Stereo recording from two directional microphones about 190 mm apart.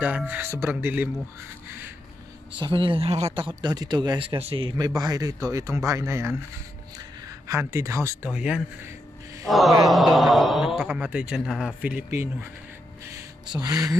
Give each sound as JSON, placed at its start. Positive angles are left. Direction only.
{"t": 0.0, "sound": "speech", "side_deg": -10}
{"t": 2.6, "sound": "speech", "side_deg": -25}
{"t": 7.4, "sound": "a man's voice", "side_deg": -15}
{"t": 13.5, "sound": "speech", "side_deg": -20}